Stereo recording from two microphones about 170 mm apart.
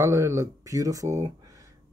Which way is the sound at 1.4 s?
20° right (ahead or behind).